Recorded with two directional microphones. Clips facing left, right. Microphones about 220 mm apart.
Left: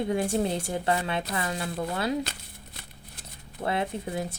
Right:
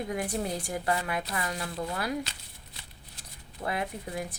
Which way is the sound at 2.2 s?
55° left (ahead or behind).